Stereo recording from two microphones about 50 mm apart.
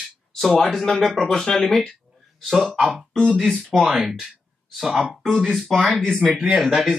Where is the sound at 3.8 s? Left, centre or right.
Centre.